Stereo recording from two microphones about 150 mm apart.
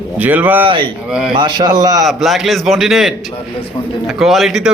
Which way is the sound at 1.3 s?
30° right (ahead or behind).